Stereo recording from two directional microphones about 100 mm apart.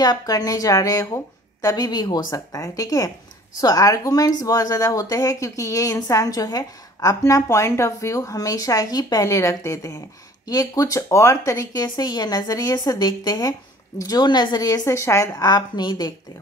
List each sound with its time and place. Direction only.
0.0 s speech: 40° left (ahead or behind)